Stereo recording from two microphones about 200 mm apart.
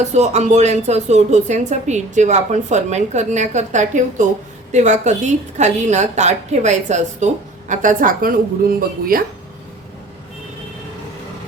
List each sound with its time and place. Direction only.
0.0 s a woman's voice: 35° right (ahead or behind)